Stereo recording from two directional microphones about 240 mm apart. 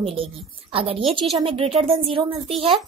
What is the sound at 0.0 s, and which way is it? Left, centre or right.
A child's voice, right.